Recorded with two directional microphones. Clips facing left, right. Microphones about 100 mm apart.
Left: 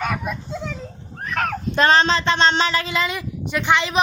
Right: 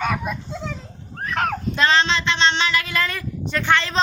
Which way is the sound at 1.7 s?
45° left (ahead or behind).